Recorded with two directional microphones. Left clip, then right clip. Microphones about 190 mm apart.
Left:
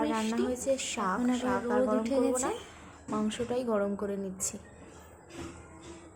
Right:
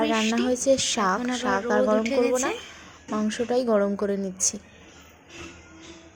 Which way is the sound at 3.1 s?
20° right (ahead or behind).